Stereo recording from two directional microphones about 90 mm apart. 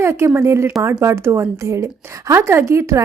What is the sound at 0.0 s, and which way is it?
A woman's voice, 30° right (ahead or behind).